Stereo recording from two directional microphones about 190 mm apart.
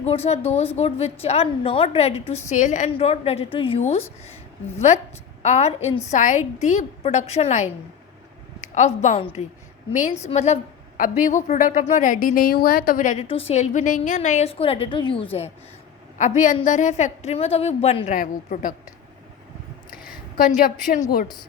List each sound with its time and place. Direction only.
0.0 s a woman's voice: 35° left (ahead or behind)
5.4 s a woman's voice: 35° left (ahead or behind)
8.7 s a woman's voice: 40° left (ahead or behind)
10.2 s a woman's voice: 35° left (ahead or behind)
13.2 s a woman's voice: 30° left (ahead or behind)
16.1 s a woman's voice: 40° left (ahead or behind)
19.9 s a sound: 45° left (ahead or behind)
20.6 s a woman's voice: 45° left (ahead or behind)